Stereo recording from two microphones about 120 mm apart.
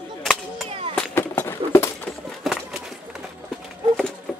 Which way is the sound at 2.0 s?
Centre (ahead or behind).